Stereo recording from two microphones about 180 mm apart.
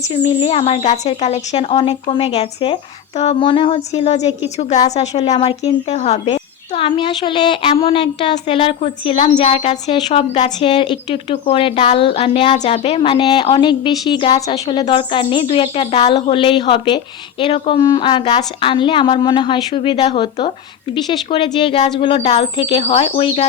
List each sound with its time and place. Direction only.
0.1 s speech: 30° left (ahead or behind)
6.3 s speech: 25° left (ahead or behind)